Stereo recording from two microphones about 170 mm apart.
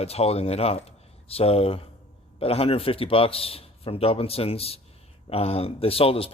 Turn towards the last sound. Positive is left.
turn(degrees=35)  # may be behind; listen again after turning